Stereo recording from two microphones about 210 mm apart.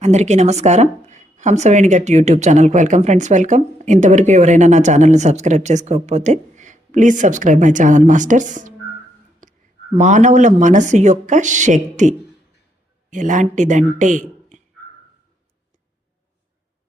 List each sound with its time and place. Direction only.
0.0 s speech: 30° right (ahead or behind)
9.4 s a sound: 35° right (ahead or behind)
10.0 s a man's voice: 35° right (ahead or behind)